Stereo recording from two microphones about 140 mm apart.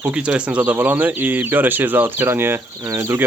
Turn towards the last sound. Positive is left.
turn(degrees=-20)  # may be behind; listen again after turning